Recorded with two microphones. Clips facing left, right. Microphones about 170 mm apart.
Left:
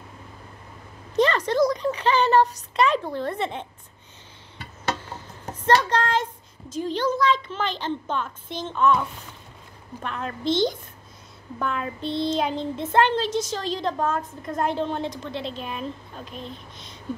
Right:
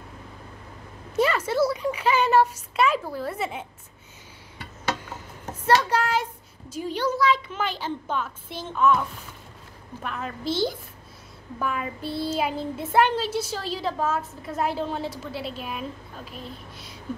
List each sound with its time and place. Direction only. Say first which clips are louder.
1.1 s a child's voice: left 2 dB; 10° right (ahead or behind)
5.7 s a child's voice: left 1 dB; 10° right (ahead or behind)
10.0 s a woman's voice: left 3 dB; 5° right (ahead or behind)